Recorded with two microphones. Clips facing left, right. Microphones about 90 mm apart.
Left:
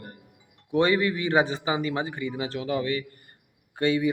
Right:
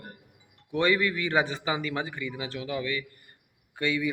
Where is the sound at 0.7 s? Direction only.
25° left (ahead or behind).